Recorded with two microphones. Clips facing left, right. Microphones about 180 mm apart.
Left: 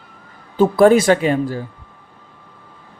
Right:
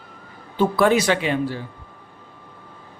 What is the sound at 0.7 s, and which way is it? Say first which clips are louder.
Speech: left 7 dB; 45° left (ahead or behind).